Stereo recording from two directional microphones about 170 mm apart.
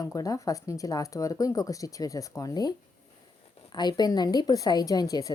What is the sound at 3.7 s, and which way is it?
Speech, 25° left (ahead or behind).